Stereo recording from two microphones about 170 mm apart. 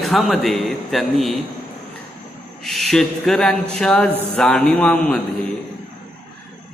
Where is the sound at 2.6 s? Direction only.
Centre (ahead or behind).